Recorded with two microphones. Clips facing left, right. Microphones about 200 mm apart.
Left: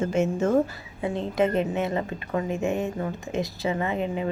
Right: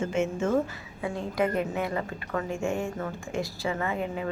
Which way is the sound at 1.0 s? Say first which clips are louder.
Left 4 dB; 20° left (ahead or behind).